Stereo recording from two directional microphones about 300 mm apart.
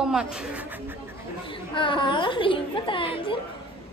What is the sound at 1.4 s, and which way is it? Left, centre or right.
A woman's voice, centre.